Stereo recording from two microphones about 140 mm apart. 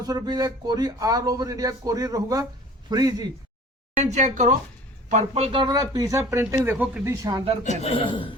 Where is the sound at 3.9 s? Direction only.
55° right (ahead or behind); by 7.4 s 25° right (ahead or behind).